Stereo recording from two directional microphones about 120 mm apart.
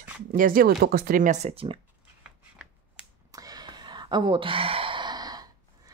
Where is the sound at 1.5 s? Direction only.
50° right (ahead or behind).